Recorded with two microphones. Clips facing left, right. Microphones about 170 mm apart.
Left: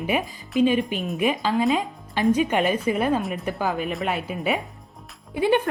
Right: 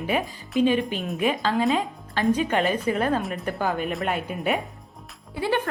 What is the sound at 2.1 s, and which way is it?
A woman's voice, 15° left (ahead or behind).